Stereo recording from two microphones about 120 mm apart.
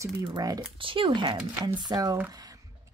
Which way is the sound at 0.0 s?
30° right (ahead or behind).